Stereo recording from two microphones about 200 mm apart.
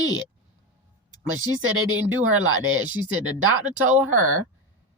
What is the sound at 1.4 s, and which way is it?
A woman's voice, 90° right.